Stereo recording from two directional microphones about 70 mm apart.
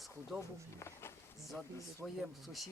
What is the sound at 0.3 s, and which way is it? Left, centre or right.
Speech, left.